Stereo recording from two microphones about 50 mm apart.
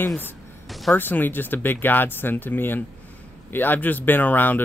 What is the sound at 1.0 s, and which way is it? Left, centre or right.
Speech, left.